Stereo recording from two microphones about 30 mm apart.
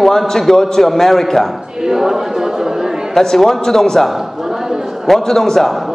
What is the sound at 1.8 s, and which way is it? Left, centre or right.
Speech, centre.